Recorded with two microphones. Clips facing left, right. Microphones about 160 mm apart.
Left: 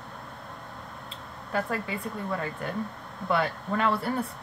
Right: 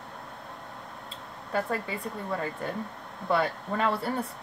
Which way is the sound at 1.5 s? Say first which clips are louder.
Even; 30° right (ahead or behind).